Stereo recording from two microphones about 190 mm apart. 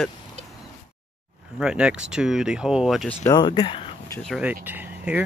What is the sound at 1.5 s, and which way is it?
Speech, 5° right (ahead or behind).